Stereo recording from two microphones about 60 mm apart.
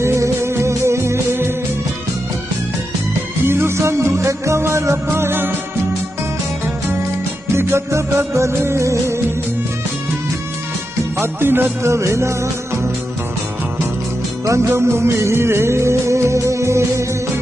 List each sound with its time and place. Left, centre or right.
0.0 s music: right
3.4 s music: right
7.5 s music: right
11.1 s music: right
11.8 s music: right
14.4 s music: right